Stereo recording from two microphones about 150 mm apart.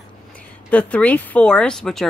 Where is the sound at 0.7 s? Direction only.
10° left (ahead or behind).